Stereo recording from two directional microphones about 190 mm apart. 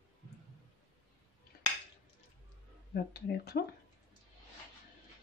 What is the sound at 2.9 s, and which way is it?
Speech, 55° left (ahead or behind).